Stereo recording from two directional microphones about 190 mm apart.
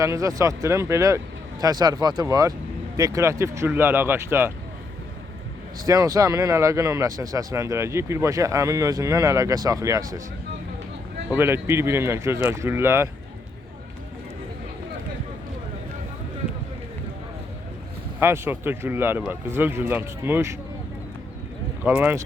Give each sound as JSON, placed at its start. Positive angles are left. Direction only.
{"t": 0.0, "sound": "speech", "side_deg": -15}
{"t": 5.8, "sound": "speech", "side_deg": -20}
{"t": 11.3, "sound": "speech", "side_deg": -10}
{"t": 18.2, "sound": "speech", "side_deg": -10}
{"t": 21.8, "sound": "speech", "side_deg": -10}